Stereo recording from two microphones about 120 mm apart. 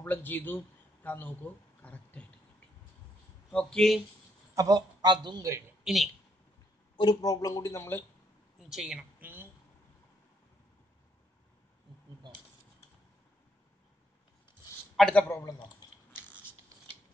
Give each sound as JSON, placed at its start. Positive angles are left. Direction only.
{"t": 0.0, "sound": "a man's voice", "side_deg": 15}
{"t": 3.5, "sound": "speech", "side_deg": 5}
{"t": 4.6, "sound": "a man's voice", "side_deg": -30}
{"t": 7.0, "sound": "speech", "side_deg": 35}
{"t": 8.5, "sound": "speech", "side_deg": -5}
{"t": 9.2, "sound": "a sound", "side_deg": -15}
{"t": 15.0, "sound": "a man's voice", "side_deg": 5}
{"t": 15.2, "sound": "speech", "side_deg": 25}